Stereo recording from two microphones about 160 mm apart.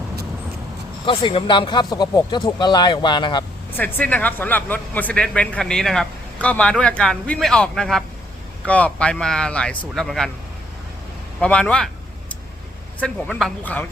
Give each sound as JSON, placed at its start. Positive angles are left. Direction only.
{"t": 1.2, "sound": "speech", "side_deg": 30}
{"t": 3.8, "sound": "a man's voice", "side_deg": 10}
{"t": 11.3, "sound": "a man's voice", "side_deg": 5}
{"t": 13.0, "sound": "a man's voice", "side_deg": 10}